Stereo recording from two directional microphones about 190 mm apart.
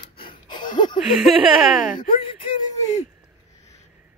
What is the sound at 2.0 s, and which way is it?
Speech, 25° left (ahead or behind).